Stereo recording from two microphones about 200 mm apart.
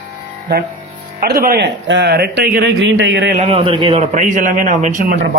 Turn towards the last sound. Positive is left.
turn(degrees=-40)  # may be behind; listen again after turning